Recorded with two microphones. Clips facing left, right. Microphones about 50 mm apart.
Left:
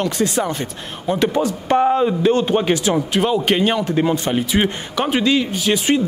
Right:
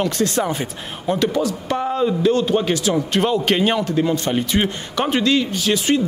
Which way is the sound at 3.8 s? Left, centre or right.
Centre.